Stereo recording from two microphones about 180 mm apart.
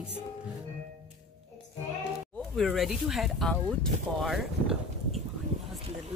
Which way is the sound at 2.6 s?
Centre (ahead or behind).